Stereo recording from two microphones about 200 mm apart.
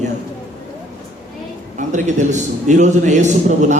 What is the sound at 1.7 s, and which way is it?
Speech, 40° right (ahead or behind).